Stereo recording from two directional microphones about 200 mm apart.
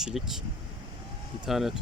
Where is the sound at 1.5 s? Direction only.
Centre (ahead or behind).